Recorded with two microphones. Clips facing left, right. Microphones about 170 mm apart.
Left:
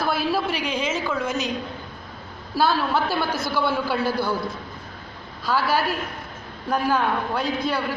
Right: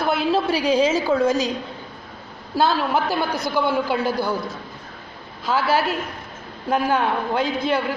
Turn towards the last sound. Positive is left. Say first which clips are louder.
# right 3 dB
turn(degrees=-20)  # may be behind; listen again after turning